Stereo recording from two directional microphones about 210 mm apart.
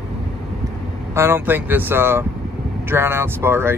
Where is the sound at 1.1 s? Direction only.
10° right (ahead or behind).